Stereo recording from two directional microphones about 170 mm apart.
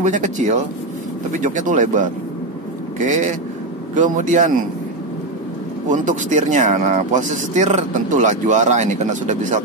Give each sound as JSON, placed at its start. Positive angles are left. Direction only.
{"t": 0.0, "sound": "speech", "side_deg": -45}
{"t": 5.9, "sound": "speech", "side_deg": -45}